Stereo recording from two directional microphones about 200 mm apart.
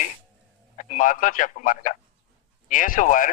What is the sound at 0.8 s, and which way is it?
A man's voice, 40° left (ahead or behind).